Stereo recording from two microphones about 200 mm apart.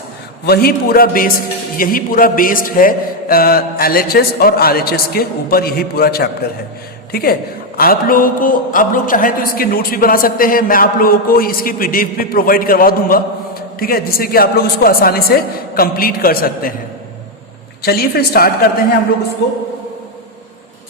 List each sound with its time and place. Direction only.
0.4 s speech: 50° left (ahead or behind)
17.8 s speech: 50° left (ahead or behind)